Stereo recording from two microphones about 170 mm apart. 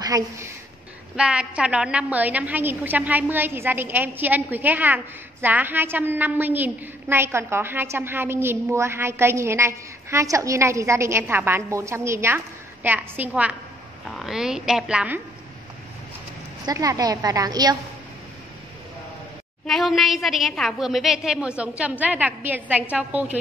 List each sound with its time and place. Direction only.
1.1 s a woman's voice: 5° right (ahead or behind)
16.6 s a woman's voice: 20° right (ahead or behind)
19.6 s a woman's voice: centre (ahead or behind)